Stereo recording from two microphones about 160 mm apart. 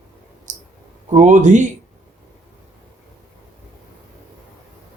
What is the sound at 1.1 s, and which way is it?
Speech, 50° right (ahead or behind).